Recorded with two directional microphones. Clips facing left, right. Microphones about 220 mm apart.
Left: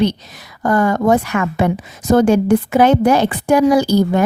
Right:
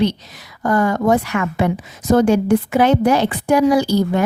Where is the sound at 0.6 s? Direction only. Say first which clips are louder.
Left 2 dB; 50° left (ahead or behind).